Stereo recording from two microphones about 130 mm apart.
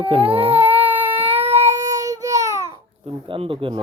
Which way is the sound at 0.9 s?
15° right (ahead or behind).